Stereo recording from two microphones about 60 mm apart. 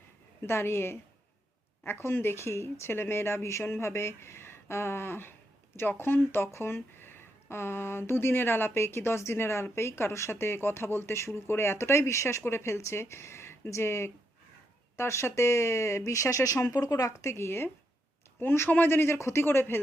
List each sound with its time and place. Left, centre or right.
0.4 s speech: left